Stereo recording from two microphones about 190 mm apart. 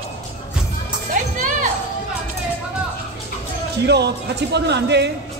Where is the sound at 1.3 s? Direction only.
45° right (ahead or behind).